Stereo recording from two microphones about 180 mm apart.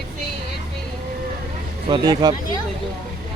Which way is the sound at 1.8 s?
25° right (ahead or behind).